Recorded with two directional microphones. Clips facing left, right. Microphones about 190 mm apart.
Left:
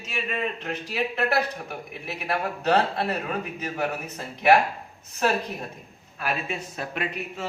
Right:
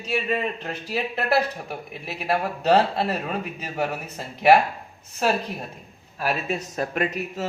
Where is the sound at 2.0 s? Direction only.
30° right (ahead or behind).